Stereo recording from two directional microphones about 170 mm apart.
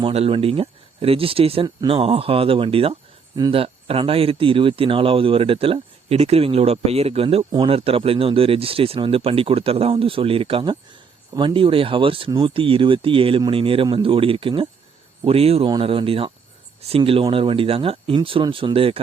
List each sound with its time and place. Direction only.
0.0 s speech: 35° right (ahead or behind)